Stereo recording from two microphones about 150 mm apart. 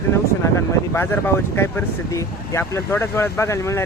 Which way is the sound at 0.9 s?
15° left (ahead or behind).